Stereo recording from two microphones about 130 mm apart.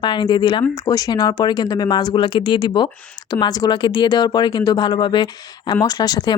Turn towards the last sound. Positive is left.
turn(degrees=30)  # may be behind; listen again after turning